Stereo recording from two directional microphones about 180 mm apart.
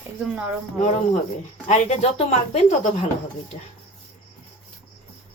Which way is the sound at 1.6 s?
40° left (ahead or behind).